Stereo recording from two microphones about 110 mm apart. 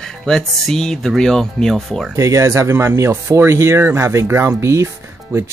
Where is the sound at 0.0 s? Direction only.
Centre (ahead or behind).